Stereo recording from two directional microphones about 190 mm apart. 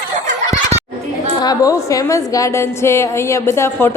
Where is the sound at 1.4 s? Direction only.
20° left (ahead or behind).